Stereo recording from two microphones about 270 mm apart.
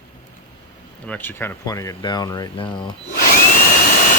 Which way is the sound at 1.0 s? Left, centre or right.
Centre.